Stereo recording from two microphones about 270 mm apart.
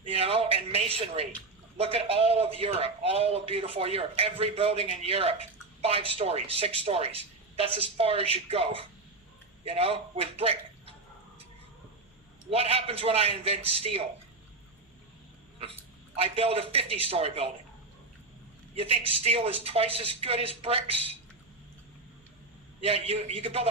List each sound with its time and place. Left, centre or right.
0.0 s a sound: right
1.8 s a man's voice: right
12.5 s a man's voice: right
16.1 s a man's voice: right
18.7 s a man's voice: right
22.8 s a man's voice: right